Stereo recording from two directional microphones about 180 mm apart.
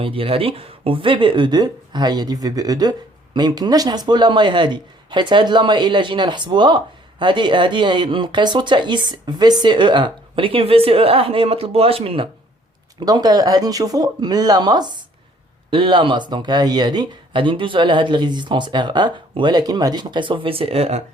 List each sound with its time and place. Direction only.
0.0 s speech: 30° right (ahead or behind)